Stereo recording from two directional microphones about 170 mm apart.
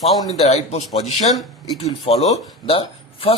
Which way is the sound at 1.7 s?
35° left (ahead or behind).